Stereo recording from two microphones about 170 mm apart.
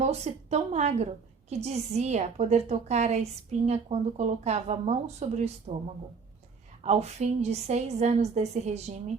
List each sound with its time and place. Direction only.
0.0 s a woman's voice: 40° right (ahead or behind)
6.8 s a woman's voice: 40° right (ahead or behind)